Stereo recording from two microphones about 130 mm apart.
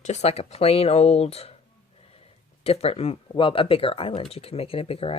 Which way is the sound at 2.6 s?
50° left (ahead or behind).